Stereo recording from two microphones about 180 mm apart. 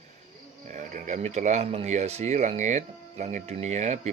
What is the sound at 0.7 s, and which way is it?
Speech, 40° right (ahead or behind).